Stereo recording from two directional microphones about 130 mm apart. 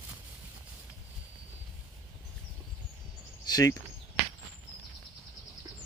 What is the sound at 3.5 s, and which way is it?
Speech, 30° left (ahead or behind).